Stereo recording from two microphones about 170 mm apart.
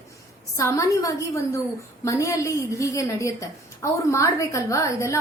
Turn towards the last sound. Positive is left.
turn(degrees=20)  # may be behind; listen again after turning